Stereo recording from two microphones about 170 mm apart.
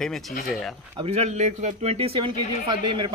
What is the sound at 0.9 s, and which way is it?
Speech, 35° right (ahead or behind).